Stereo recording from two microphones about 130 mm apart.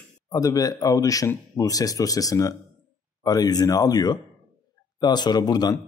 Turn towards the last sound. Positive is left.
turn(degrees=30)  # may be behind; listen again after turning